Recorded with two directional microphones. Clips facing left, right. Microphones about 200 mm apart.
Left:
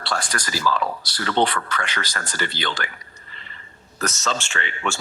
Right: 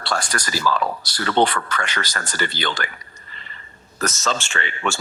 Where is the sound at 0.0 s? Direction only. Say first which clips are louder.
Right 2 dB; 45° right (ahead or behind).